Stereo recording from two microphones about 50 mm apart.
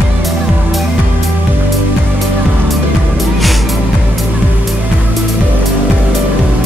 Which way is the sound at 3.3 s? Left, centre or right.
Centre.